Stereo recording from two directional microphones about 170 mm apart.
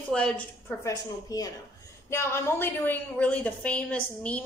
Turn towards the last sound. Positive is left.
turn(degrees=10)  # may be behind; listen again after turning